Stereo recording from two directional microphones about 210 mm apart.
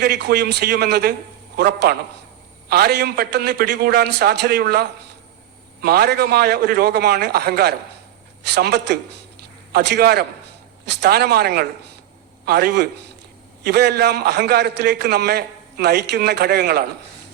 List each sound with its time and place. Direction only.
0.0 s a man's voice: 50° right (ahead or behind)